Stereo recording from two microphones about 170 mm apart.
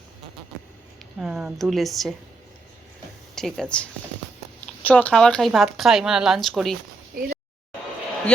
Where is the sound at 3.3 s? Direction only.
Centre (ahead or behind).